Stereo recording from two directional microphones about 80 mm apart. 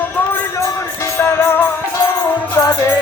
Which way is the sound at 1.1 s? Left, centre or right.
Left.